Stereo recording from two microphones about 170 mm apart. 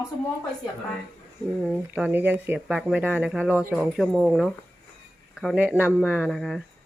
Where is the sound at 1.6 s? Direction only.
5° right (ahead or behind).